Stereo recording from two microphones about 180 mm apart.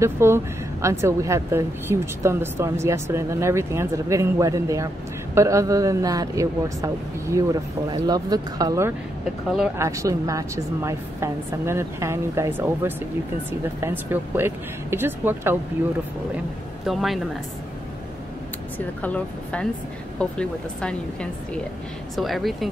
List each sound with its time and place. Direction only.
0.0 s speech: 15° right (ahead or behind)
16.8 s speech: centre (ahead or behind)
19.0 s speech: 5° left (ahead or behind)